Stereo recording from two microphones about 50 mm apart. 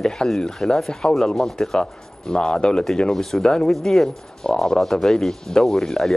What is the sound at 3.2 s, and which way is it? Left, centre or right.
Speech, centre.